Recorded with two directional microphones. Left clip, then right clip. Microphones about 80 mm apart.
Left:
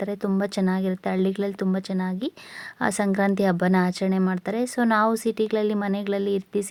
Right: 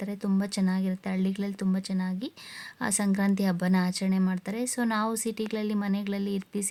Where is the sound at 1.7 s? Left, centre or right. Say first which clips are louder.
Left 5 dB; left.